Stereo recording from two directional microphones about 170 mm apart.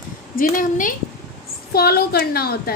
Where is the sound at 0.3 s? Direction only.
55° left (ahead or behind).